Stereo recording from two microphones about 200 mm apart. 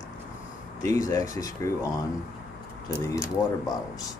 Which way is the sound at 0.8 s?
15° left (ahead or behind).